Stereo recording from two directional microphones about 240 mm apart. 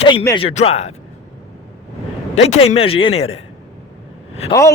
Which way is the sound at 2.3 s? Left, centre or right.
Left.